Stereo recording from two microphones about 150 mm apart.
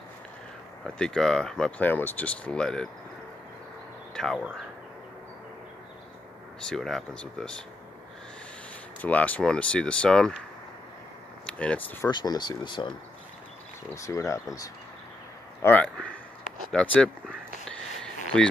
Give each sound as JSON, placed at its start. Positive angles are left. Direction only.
{"t": 0.9, "sound": "speech", "side_deg": 5}
{"t": 4.1, "sound": "speech", "side_deg": 5}
{"t": 6.7, "sound": "speech", "side_deg": 5}
{"t": 9.0, "sound": "speech", "side_deg": 10}
{"t": 11.4, "sound": "speech", "side_deg": 10}
{"t": 12.1, "sound": "speech", "side_deg": 30}
{"t": 13.8, "sound": "speech", "side_deg": 20}
{"t": 15.6, "sound": "speech", "side_deg": 10}
{"t": 17.6, "sound": "a sound", "side_deg": 5}